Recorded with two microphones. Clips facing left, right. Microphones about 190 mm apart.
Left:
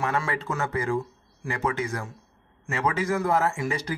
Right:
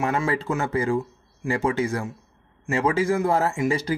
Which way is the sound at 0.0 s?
25° right (ahead or behind).